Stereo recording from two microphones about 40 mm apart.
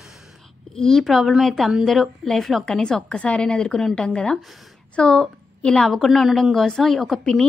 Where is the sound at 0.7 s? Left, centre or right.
Centre.